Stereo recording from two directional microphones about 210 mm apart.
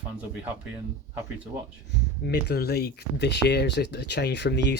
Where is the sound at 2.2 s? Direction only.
50° left (ahead or behind).